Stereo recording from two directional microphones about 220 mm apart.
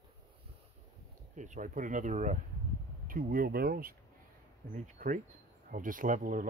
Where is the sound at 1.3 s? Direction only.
35° right (ahead or behind).